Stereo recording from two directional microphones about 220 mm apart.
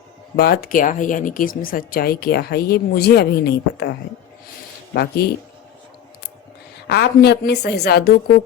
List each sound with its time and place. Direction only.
0.3 s speech: 45° left (ahead or behind)
4.9 s speech: 45° left (ahead or behind)
6.8 s speech: 50° left (ahead or behind)